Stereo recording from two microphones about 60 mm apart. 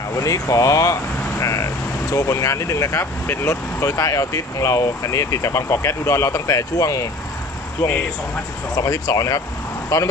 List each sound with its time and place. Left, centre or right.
0.2 s speech: left
7.8 s speech: left
8.8 s speech: left
9.9 s speech: left